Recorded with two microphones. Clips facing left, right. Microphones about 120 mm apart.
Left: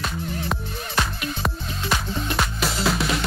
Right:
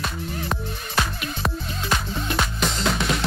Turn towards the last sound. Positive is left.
turn(degrees=0)  # may be behind; listen again after turning